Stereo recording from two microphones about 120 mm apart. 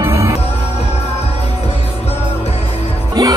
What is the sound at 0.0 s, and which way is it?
Music, 25° right (ahead or behind).